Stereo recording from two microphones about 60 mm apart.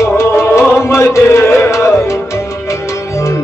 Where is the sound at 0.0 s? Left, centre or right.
Left.